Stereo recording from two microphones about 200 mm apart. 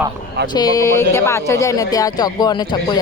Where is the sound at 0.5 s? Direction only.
20° left (ahead or behind).